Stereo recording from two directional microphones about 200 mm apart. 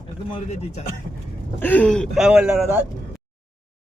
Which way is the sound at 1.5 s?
10° left (ahead or behind).